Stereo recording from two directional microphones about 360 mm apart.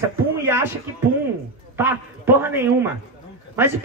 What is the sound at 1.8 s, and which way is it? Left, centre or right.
Speech, centre.